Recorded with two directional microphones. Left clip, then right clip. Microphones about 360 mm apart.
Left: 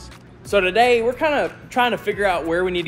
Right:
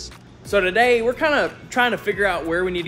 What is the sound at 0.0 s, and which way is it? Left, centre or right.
Speech, centre.